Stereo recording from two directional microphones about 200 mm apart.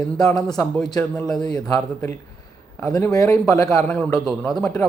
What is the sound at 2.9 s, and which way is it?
A man's voice, 15° left (ahead or behind).